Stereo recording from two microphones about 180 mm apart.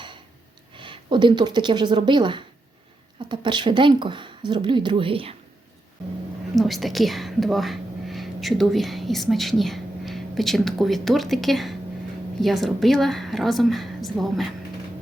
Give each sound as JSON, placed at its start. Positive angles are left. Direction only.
{"t": 0.8, "sound": "speech", "side_deg": -25}
{"t": 6.6, "sound": "a woman's voice", "side_deg": 0}